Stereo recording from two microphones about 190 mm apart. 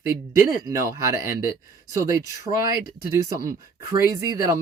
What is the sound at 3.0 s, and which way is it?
Speech, 15° right (ahead or behind).